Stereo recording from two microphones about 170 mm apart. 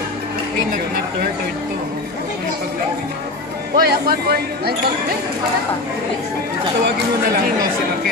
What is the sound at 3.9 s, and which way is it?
Speech, 65° right (ahead or behind).